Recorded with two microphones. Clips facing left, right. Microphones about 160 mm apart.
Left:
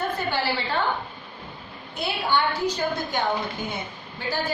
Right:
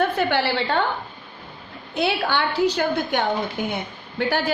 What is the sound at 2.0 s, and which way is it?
A woman's voice, 85° right.